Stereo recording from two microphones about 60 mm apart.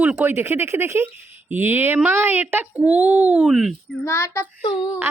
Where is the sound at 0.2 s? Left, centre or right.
Right.